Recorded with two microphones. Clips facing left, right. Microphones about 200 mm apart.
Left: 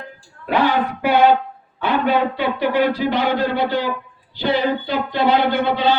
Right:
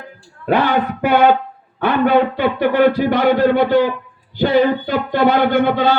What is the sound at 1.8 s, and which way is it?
A man's voice, 50° right (ahead or behind).